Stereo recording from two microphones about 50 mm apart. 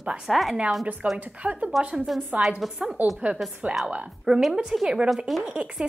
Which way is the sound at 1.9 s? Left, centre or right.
Centre.